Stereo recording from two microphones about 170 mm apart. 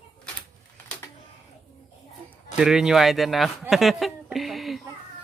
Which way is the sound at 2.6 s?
5° right (ahead or behind).